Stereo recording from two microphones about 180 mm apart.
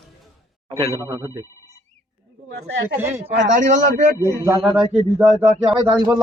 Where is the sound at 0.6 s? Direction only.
30° right (ahead or behind).